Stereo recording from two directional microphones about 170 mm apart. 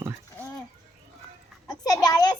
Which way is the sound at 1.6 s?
20° left (ahead or behind).